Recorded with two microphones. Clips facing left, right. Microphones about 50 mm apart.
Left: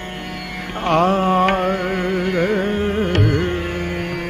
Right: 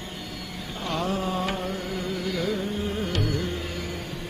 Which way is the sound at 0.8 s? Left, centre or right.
Left.